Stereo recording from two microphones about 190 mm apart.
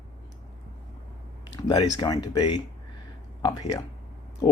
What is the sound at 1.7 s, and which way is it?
Speech, 20° left (ahead or behind).